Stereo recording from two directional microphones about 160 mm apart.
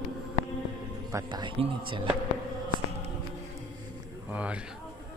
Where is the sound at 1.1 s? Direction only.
25° right (ahead or behind).